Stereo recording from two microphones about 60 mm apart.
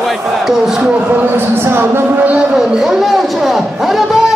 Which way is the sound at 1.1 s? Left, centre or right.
Right.